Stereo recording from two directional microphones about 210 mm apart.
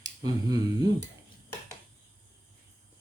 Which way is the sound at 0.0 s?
15° right (ahead or behind).